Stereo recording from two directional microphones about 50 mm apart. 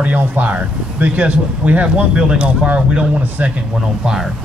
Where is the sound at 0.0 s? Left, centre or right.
Right.